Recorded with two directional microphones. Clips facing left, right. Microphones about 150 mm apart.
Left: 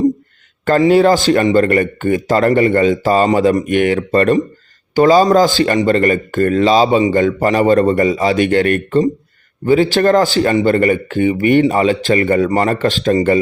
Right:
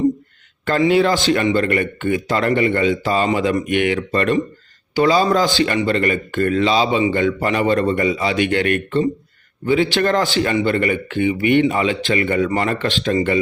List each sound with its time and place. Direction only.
0.6 s speech: 40° left (ahead or behind)